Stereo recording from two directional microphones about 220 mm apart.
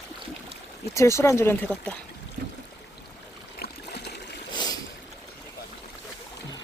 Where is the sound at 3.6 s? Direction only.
50° left (ahead or behind).